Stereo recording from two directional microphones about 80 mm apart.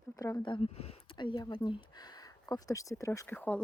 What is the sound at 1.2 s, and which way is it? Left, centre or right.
Speech, left.